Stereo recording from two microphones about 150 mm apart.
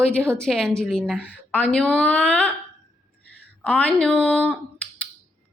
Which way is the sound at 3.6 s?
10° left (ahead or behind).